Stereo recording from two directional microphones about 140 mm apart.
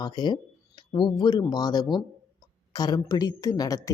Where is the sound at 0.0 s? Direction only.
30° left (ahead or behind).